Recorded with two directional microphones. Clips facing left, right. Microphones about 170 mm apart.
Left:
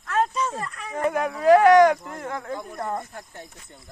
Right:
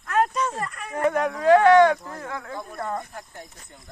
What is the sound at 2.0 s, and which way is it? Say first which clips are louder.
Speech: left 2 dB; 20° left (ahead or behind).